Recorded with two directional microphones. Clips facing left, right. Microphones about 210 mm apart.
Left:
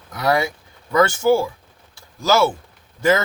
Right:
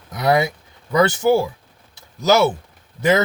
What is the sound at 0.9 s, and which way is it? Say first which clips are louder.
Speech: even; 20° right (ahead or behind).